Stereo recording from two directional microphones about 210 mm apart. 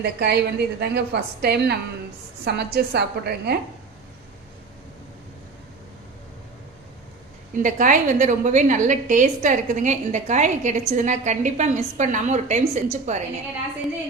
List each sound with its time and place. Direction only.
0.0 s a woman's voice: 50° right (ahead or behind)
7.5 s a woman's voice: 40° right (ahead or behind)